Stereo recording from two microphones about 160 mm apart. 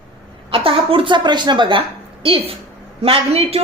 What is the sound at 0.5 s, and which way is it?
A woman's voice, 35° right (ahead or behind).